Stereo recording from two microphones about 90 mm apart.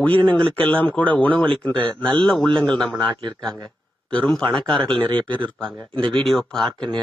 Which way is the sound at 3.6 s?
10° left (ahead or behind).